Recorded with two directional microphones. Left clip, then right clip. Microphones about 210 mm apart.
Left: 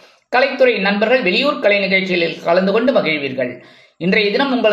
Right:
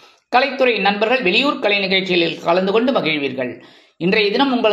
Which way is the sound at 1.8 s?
25° right (ahead or behind).